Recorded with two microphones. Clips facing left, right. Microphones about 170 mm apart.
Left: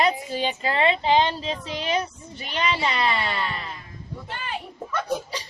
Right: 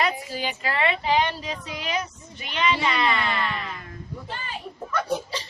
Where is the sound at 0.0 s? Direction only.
25° left (ahead or behind).